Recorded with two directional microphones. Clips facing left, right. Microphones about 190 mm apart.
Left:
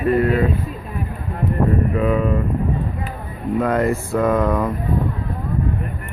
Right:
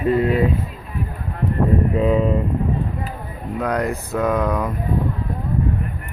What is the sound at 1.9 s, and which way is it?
Speech, 25° right (ahead or behind).